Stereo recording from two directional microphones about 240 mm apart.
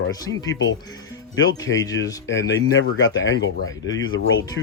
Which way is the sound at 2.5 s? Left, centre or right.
Left.